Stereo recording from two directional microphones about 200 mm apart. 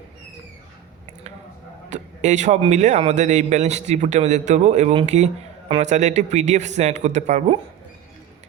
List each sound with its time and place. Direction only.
1.9 s speech: 35° right (ahead or behind)